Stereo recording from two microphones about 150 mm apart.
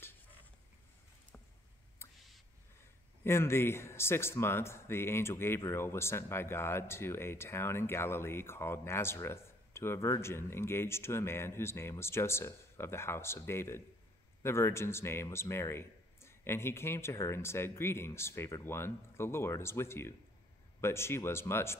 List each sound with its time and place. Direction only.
3.3 s speech: 15° left (ahead or behind)